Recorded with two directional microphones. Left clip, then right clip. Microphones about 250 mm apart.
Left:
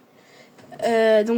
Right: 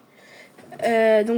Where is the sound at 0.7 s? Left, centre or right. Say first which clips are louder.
Even; centre.